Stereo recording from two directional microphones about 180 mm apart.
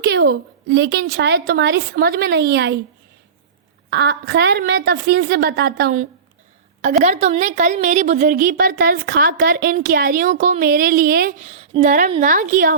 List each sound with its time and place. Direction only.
0.0 s a woman's voice: 60° right (ahead or behind)
3.8 s a woman's voice: 65° right (ahead or behind)
6.8 s a woman's voice: 40° right (ahead or behind)
11.4 s a woman's voice: 35° right (ahead or behind)